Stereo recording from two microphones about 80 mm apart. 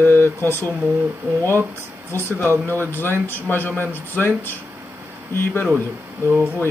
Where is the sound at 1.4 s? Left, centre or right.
Right.